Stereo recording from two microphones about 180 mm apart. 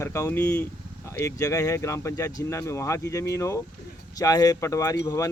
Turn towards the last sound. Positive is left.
turn(degrees=15)  # may be behind; listen again after turning